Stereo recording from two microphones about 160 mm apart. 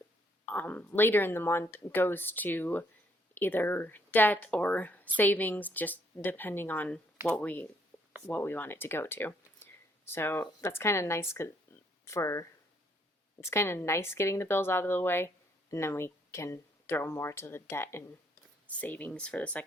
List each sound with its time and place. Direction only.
0.5 s speech: 10° left (ahead or behind)
7.9 s a sound: 10° left (ahead or behind)
8.3 s speech: 15° left (ahead or behind)